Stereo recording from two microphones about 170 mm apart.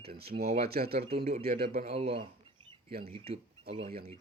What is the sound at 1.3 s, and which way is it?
Speech, 60° right (ahead or behind).